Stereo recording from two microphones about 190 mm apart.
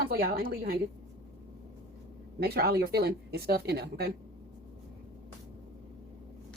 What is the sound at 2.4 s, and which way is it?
Speech, 55° right (ahead or behind).